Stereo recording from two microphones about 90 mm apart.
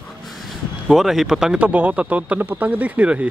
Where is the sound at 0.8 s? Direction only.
Centre (ahead or behind).